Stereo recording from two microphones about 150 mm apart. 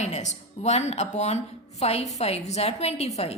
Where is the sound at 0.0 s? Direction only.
50° left (ahead or behind).